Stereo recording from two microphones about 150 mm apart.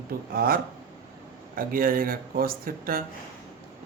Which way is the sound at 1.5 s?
70° right (ahead or behind).